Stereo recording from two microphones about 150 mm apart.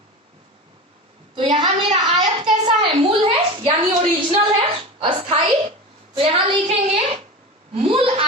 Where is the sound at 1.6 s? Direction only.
30° right (ahead or behind).